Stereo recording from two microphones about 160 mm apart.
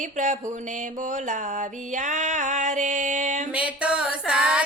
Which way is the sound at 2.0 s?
50° right (ahead or behind).